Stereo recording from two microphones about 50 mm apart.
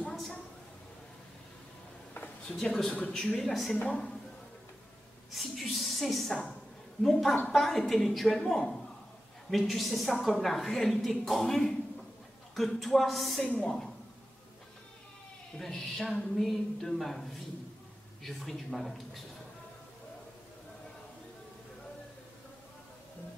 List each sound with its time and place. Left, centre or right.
2.4 s speech: centre
3.7 s a woman's voice: left
5.3 s a sound: centre
7.0 s a woman's voice: centre
13.4 s a woman's voice: left
15.5 s a woman's voice: centre